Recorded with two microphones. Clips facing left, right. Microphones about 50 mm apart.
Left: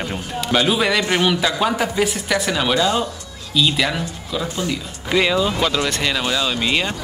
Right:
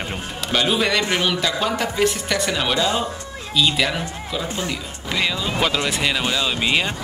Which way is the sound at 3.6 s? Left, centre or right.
Centre.